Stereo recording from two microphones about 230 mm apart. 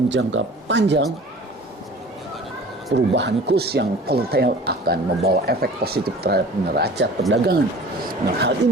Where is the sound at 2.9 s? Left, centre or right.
Right.